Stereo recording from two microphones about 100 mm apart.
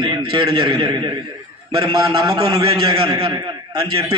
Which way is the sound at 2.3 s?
75° right (ahead or behind).